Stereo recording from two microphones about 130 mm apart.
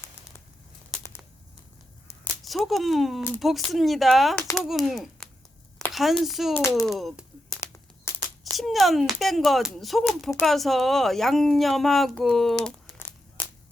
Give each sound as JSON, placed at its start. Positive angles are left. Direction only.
{"t": 2.4, "sound": "a woman's voice", "side_deg": 0}
{"t": 8.4, "sound": "a woman's voice", "side_deg": 0}
{"t": 13.0, "sound": "a sound", "side_deg": 20}